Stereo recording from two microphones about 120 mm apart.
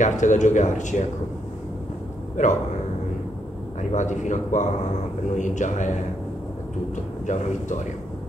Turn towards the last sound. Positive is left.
turn(degrees=90)